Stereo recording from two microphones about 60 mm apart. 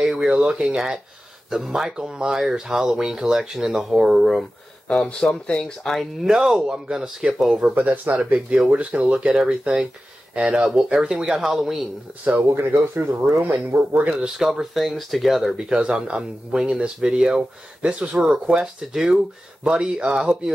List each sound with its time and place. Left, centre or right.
0.0 s speech: centre
4.8 s speech: centre
6.2 s speech: centre
7.7 s speech: right; by 11.9 s centre
12.5 s speech: right
14.4 s speech: centre
15.5 s speech: centre